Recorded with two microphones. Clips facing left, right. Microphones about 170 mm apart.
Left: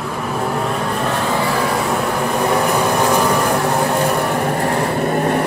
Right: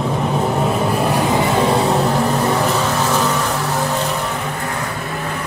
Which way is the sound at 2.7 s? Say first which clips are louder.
Left 2 dB; 15° left (ahead or behind).